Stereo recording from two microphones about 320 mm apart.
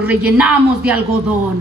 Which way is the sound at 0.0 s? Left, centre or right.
Centre.